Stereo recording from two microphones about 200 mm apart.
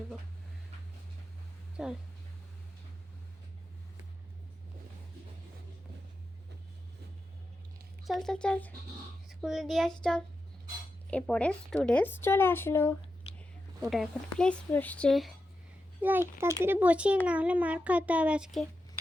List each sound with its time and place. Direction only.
1.7 s speech: 5° right (ahead or behind)
8.0 s speech: centre (ahead or behind)
13.2 s whispering: 30° left (ahead or behind)
13.9 s speech: centre (ahead or behind)
16.0 s a child's voice: 10° right (ahead or behind)